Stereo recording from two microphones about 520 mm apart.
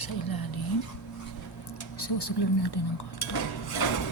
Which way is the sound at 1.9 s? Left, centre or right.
Left.